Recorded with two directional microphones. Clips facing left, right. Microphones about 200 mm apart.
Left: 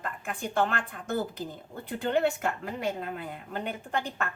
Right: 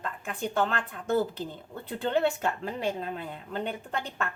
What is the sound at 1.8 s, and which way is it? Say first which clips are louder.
Speech: even; 30° right (ahead or behind).